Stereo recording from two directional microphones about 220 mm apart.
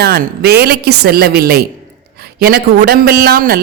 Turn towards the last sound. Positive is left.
turn(degrees=-40)  # may be behind; listen again after turning